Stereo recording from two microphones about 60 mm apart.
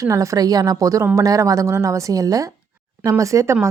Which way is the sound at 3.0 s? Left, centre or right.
Right.